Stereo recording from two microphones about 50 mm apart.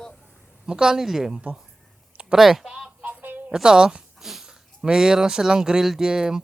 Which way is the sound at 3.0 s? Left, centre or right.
Right.